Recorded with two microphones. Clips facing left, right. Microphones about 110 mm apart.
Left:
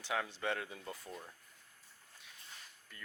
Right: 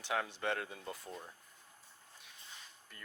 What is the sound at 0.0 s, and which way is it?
Speech, 45° right (ahead or behind).